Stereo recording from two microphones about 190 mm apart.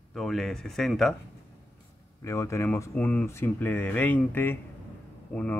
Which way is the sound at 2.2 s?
15° left (ahead or behind).